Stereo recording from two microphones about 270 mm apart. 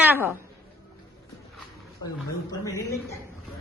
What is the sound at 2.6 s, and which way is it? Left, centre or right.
Speech, centre.